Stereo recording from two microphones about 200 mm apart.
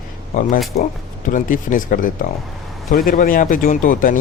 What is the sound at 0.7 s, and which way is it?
Speech, 50° left (ahead or behind).